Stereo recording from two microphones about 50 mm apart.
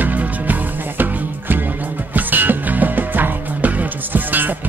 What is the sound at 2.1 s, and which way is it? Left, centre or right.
Music, right.